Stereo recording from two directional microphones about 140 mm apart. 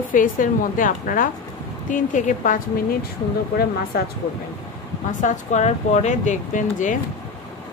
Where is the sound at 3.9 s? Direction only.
90° left.